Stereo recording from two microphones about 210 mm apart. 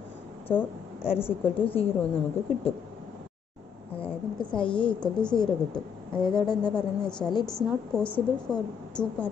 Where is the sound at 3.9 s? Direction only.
25° left (ahead or behind).